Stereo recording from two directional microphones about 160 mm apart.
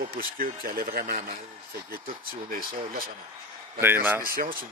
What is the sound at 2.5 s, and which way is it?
Speech, 65° right (ahead or behind).